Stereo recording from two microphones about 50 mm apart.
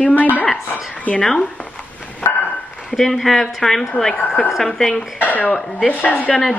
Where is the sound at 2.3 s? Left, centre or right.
Left.